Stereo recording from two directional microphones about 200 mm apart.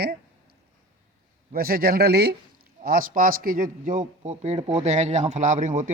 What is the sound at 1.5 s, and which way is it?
A man's voice, 50° right (ahead or behind).